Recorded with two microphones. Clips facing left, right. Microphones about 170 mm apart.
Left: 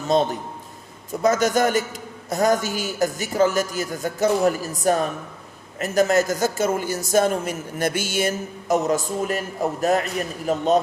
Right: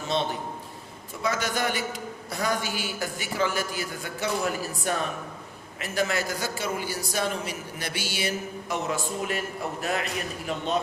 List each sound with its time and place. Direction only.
0.1 s a man's voice: 40° left (ahead or behind)